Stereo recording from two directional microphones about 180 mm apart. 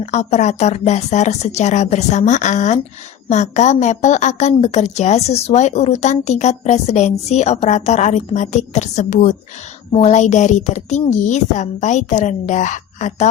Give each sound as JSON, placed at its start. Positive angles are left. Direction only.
{"t": 0.0, "sound": "a woman's voice", "side_deg": 40}